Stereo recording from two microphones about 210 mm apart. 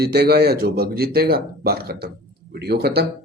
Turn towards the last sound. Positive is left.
turn(degrees=-50)  # may be behind; listen again after turning